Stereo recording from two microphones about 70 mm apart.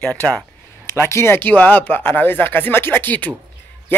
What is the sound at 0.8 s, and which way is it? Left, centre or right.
Speech, left.